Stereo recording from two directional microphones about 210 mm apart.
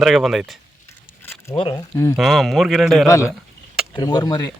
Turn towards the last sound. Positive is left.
turn(degrees=20)  # may be behind; listen again after turning